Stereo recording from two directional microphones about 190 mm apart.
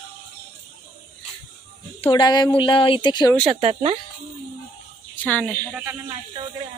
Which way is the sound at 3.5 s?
30° right (ahead or behind).